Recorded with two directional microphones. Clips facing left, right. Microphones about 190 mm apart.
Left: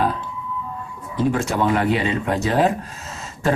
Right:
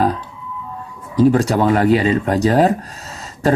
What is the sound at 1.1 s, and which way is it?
Speech, 35° right (ahead or behind).